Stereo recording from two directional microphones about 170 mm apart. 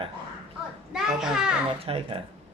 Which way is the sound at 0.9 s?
5° right (ahead or behind).